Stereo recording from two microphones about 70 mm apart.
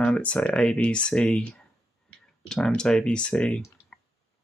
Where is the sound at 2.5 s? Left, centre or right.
Centre.